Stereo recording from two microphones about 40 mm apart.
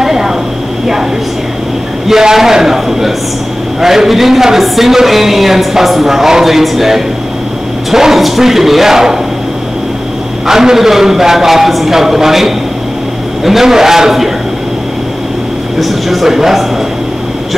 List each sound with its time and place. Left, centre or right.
0.0 s a sound: centre
2.0 s a man's voice: centre
10.4 s a man's voice: centre
15.8 s speech: centre